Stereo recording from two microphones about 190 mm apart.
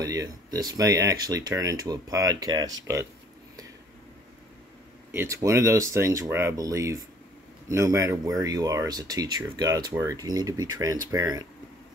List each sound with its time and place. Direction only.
0.0 s speech: 20° right (ahead or behind)
5.1 s speech: 15° right (ahead or behind)